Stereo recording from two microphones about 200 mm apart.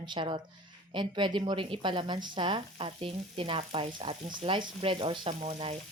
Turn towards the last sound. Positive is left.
turn(degrees=-30)  # may be behind; listen again after turning